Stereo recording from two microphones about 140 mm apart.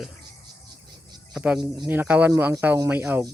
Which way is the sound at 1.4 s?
5° right (ahead or behind).